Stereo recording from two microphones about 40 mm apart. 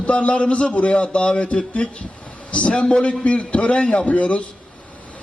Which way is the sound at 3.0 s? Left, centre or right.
Left.